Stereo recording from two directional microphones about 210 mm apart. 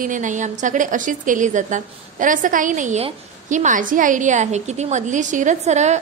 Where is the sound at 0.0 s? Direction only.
35° right (ahead or behind).